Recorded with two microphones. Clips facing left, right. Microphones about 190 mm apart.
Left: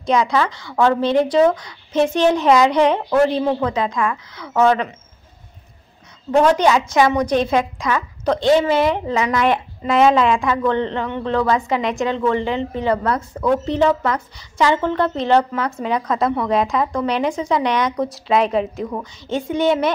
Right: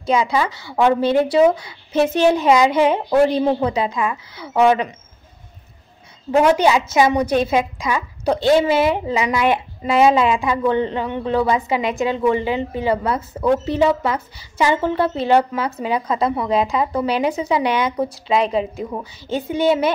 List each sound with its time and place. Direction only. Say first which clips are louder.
0.0 s a woman's voice: left 1 dB; 5° right (ahead or behind)
6.3 s a woman's voice: even; 10° right (ahead or behind)